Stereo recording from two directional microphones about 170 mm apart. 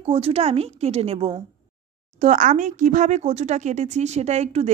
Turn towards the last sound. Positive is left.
turn(degrees=-40)  # may be behind; listen again after turning